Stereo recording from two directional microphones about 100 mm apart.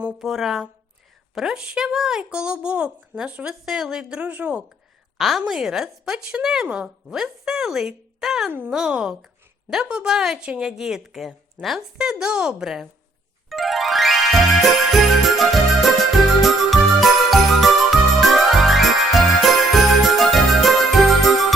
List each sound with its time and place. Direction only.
0.2 s a woman's voice: centre (ahead or behind)
5.1 s a woman's voice: centre (ahead or behind)
8.4 s speech: 20° right (ahead or behind)
8.7 s a woman's voice: 10° right (ahead or behind)
13.5 s music: centre (ahead or behind)
16.4 s jingle: centre (ahead or behind)